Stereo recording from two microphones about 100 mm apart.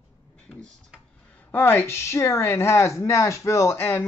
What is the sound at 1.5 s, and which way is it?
Speech, 20° left (ahead or behind).